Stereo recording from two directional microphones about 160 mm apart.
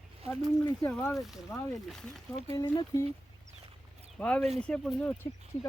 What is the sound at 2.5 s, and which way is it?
Speech, 25° left (ahead or behind).